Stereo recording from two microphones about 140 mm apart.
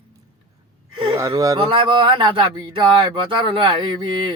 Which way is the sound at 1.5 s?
35° right (ahead or behind).